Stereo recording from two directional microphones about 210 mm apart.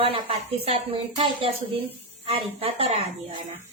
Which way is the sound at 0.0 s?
25° right (ahead or behind).